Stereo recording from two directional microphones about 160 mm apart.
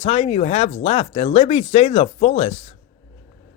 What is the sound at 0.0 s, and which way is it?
Speech, 40° left (ahead or behind).